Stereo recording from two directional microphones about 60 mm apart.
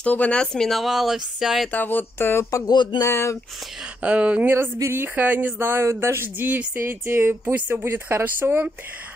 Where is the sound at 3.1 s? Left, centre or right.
Left.